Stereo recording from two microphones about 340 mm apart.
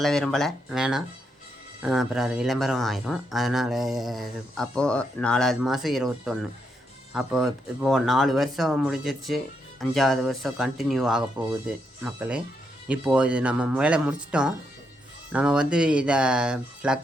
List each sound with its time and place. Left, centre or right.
0.0 s speech: centre